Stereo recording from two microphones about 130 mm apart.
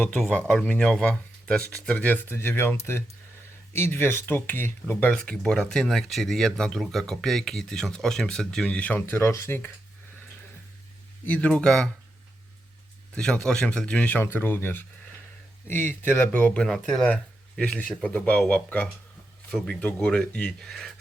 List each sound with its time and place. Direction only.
0.0 s speech: 10° left (ahead or behind)
11.3 s speech: 10° left (ahead or behind)
13.1 s speech: 5° left (ahead or behind)
16.6 s speech: centre (ahead or behind)